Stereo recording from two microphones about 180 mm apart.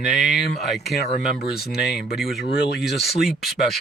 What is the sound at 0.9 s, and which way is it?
Speech, 65° left (ahead or behind).